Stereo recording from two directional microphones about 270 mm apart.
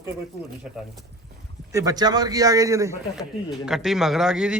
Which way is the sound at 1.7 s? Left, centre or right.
Centre.